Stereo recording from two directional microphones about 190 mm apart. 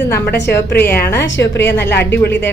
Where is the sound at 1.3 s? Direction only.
70° left (ahead or behind).